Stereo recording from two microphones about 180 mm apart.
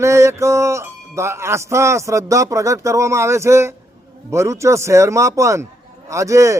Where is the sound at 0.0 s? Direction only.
15° right (ahead or behind).